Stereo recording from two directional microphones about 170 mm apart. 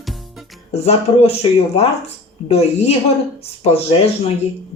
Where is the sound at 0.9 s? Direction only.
35° left (ahead or behind).